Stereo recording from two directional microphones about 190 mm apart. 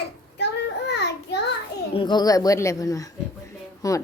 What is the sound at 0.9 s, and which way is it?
Child singing, 60° left (ahead or behind).